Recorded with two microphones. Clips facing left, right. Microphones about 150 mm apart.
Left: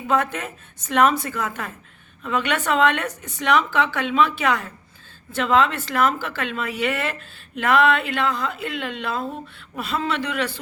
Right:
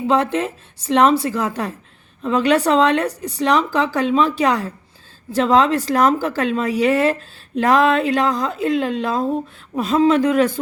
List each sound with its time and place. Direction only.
0.1 s a woman's voice: 30° right (ahead or behind)